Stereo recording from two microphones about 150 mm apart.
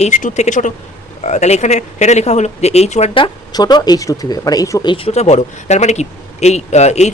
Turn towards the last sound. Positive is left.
turn(degrees=50)  # may be behind; listen again after turning